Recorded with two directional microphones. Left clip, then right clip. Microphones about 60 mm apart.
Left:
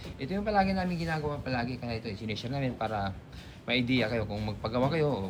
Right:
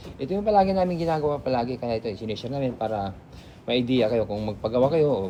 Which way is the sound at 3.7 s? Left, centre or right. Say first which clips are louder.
Right 7 dB; right.